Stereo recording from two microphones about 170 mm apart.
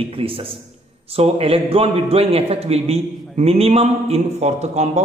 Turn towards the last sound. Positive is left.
turn(degrees=-40)  # may be behind; listen again after turning